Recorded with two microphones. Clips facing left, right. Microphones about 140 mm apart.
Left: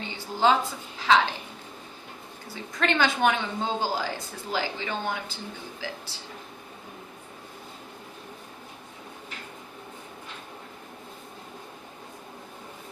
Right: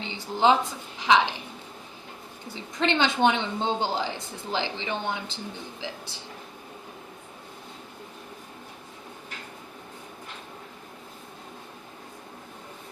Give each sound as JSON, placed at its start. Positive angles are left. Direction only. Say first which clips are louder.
{"t": 0.0, "sound": "a woman's voice", "louder": "right 1 dB", "side_deg": -20}
{"t": 2.7, "sound": "speech", "louder": "right 1 dB", "side_deg": -20}